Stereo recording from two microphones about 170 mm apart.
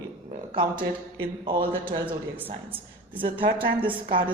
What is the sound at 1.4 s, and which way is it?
Speech, 30° right (ahead or behind).